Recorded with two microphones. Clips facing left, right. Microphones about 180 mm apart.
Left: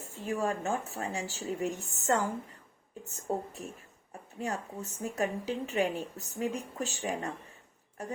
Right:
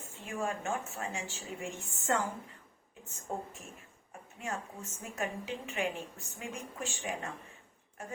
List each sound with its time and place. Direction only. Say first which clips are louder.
0.1 s a woman's voice: left 5 dB; 40° left (ahead or behind)
3.3 s a woman's voice: left 6 dB; 35° left (ahead or behind)